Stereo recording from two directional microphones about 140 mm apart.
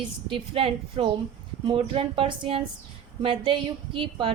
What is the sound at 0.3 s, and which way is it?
A woman's voice, 40° right (ahead or behind).